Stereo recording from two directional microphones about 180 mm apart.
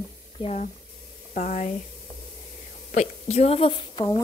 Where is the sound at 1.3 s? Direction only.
45° left (ahead or behind).